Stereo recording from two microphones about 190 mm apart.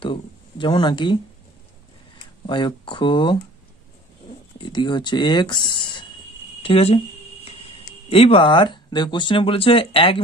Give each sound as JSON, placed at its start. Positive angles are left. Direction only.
{"t": 0.0, "sound": "a sound", "side_deg": 25}
{"t": 2.4, "sound": "speech", "side_deg": 25}
{"t": 4.6, "sound": "speech", "side_deg": 25}
{"t": 8.1, "sound": "speech", "side_deg": 30}